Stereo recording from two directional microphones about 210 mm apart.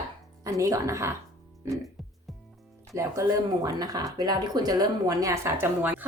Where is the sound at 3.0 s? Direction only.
15° right (ahead or behind).